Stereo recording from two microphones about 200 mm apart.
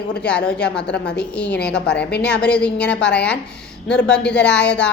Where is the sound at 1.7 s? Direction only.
5° left (ahead or behind).